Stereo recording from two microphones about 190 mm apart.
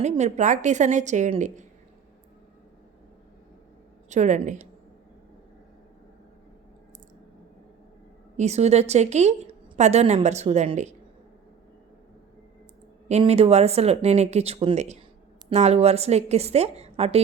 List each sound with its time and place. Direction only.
0.0 s a woman's voice: 35° right (ahead or behind)
4.1 s a woman's voice: 40° right (ahead or behind)
8.4 s a woman's voice: 35° right (ahead or behind)
13.1 s a woman's voice: 35° right (ahead or behind)